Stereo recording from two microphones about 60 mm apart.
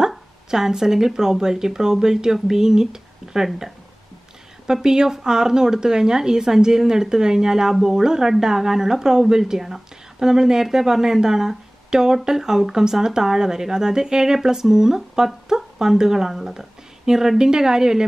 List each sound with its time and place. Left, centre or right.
0.0 s speech: centre
4.8 s speech: centre